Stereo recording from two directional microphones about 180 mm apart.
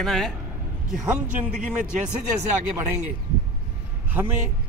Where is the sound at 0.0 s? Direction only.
Centre (ahead or behind).